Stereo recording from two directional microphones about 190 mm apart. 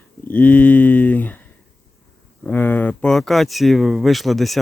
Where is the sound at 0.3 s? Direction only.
10° left (ahead or behind).